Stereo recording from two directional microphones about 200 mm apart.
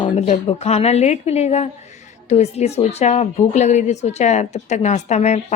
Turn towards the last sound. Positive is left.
turn(degrees=35)  # may be behind; listen again after turning